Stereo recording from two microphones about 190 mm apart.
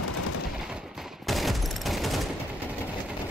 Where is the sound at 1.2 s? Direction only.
Centre (ahead or behind).